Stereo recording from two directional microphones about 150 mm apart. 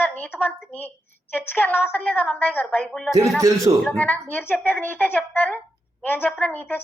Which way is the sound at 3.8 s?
10° left (ahead or behind).